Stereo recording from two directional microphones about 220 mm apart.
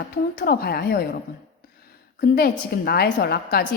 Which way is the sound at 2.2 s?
45° left (ahead or behind).